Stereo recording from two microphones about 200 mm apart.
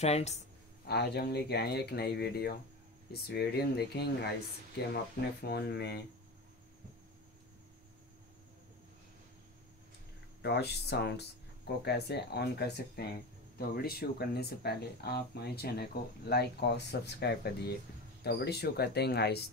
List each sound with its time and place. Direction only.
0.0 s speech: 35° left (ahead or behind)
0.8 s speech: 55° left (ahead or behind)
10.4 s speech: 55° left (ahead or behind)